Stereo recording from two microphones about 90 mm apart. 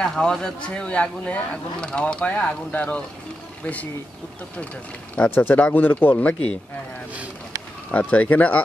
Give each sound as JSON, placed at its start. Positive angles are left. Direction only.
{"t": 0.0, "sound": "speech", "side_deg": 5}
{"t": 5.1, "sound": "speech", "side_deg": 20}
{"t": 7.9, "sound": "speech", "side_deg": 15}